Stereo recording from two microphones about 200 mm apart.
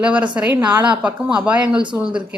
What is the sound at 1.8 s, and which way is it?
Speech, 25° right (ahead or behind).